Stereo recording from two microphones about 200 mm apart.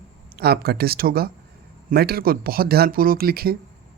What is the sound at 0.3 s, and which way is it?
Speech, 50° right (ahead or behind).